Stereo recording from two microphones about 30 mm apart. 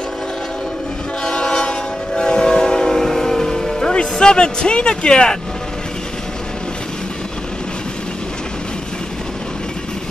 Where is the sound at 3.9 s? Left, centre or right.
Left.